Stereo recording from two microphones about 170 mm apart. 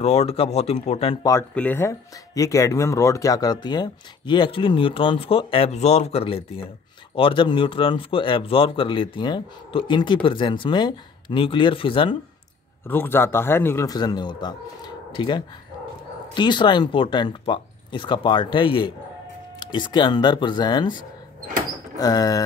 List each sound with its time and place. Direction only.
0.0 s speech: 40° left (ahead or behind)
1.5 s speech: 10° left (ahead or behind); by 12.2 s 30° left (ahead or behind)
12.8 s a man's voice: 10° left (ahead or behind)
21.9 s speech: 20° left (ahead or behind)